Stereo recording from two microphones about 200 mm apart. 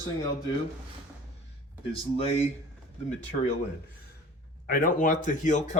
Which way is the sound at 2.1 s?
30° left (ahead or behind).